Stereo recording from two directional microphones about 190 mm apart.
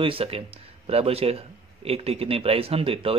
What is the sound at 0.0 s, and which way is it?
Speech, 30° right (ahead or behind).